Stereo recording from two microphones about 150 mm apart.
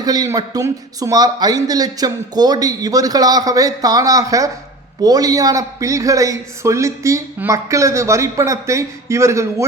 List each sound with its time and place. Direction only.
0.0 s a man's voice: 25° right (ahead or behind)